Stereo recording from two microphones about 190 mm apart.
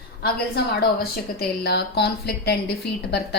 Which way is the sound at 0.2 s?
60° left (ahead or behind).